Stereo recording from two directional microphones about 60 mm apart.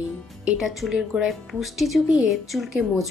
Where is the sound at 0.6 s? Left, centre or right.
Centre.